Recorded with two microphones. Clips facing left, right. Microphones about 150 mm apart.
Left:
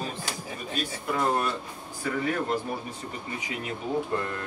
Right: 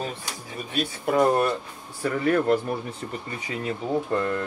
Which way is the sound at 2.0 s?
60° right (ahead or behind).